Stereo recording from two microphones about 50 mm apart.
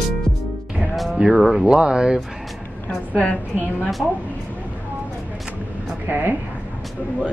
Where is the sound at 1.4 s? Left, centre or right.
Centre.